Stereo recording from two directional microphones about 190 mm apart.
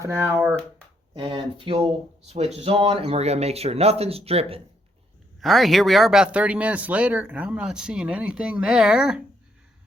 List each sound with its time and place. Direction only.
0.0 s speech: 15° right (ahead or behind); by 4.6 s 30° right (ahead or behind)
5.4 s speech: centre (ahead or behind)